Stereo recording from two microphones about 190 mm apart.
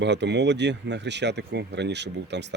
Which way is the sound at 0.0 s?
65° right (ahead or behind).